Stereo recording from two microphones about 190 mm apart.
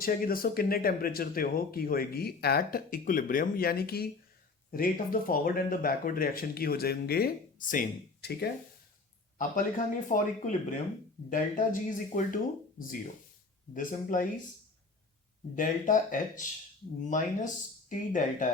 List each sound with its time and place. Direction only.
0.0 s speech: 50° left (ahead or behind)
9.4 s speech: 40° left (ahead or behind)
13.7 s speech: 45° left (ahead or behind)
15.5 s speech: 45° left (ahead or behind)